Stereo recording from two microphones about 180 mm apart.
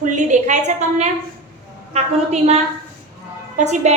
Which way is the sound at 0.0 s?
45° right (ahead or behind).